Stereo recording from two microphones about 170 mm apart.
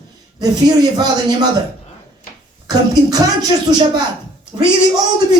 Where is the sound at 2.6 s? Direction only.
20° right (ahead or behind).